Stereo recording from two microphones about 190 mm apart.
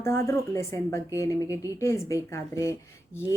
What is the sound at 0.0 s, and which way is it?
A woman's voice, 15° left (ahead or behind).